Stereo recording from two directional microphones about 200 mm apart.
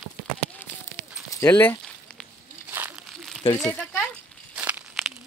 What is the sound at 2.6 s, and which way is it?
Crumpling, 10° right (ahead or behind).